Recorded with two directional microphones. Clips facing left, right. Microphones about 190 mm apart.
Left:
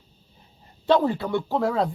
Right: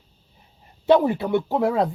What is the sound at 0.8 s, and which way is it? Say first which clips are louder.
Speech: right 3 dB; 15° right (ahead or behind).